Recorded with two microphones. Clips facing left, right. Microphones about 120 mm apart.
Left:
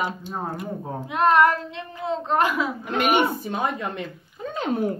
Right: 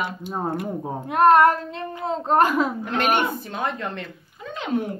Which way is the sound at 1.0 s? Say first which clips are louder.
Right 3 dB; 50° right (ahead or behind).